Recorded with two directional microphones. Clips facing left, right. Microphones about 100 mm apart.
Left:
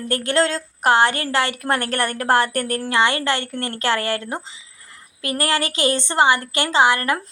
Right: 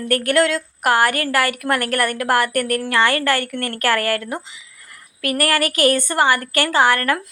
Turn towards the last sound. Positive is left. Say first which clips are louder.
# right 1 dB
turn(degrees=20)  # may be behind; listen again after turning